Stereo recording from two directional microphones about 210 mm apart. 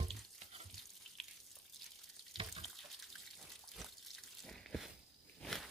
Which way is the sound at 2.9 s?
Centre (ahead or behind).